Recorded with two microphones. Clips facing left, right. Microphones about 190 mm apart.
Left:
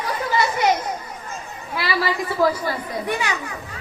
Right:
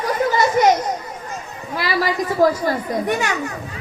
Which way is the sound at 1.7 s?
45° right (ahead or behind).